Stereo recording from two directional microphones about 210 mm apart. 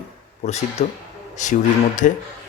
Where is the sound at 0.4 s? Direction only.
30° left (ahead or behind).